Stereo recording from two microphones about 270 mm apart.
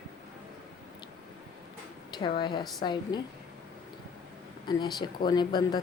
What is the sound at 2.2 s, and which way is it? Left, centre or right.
Speech, centre.